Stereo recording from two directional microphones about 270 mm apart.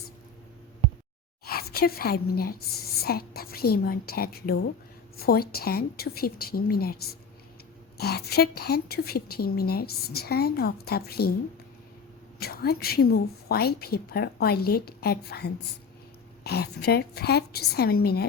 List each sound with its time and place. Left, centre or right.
1.5 s a woman's voice: left
12.4 s a woman's voice: left